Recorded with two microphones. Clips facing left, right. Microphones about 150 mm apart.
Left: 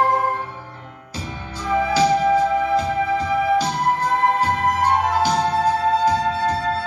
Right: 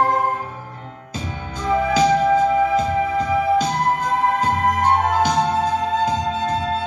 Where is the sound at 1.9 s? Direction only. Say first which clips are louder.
Even; 20° right (ahead or behind).